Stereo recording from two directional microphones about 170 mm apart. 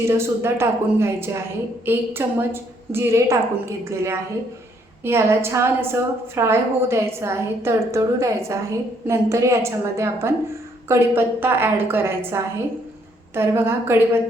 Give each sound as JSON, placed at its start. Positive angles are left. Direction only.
{"t": 0.1, "sound": "a woman's voice", "side_deg": -15}